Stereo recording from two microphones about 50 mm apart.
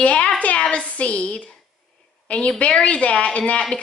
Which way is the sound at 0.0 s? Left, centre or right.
Left.